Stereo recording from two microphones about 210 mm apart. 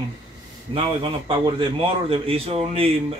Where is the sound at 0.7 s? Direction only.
25° right (ahead or behind).